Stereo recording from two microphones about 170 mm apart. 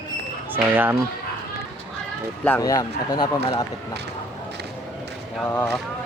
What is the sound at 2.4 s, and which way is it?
Speech, 15° left (ahead or behind).